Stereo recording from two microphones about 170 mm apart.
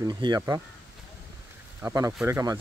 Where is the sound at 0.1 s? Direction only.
25° right (ahead or behind).